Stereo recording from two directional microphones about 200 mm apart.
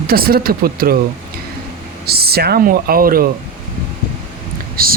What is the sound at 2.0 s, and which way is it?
Speech, 50° right (ahead or behind).